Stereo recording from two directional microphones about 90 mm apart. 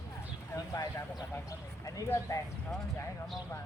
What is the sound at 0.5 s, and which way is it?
Speech, 40° left (ahead or behind).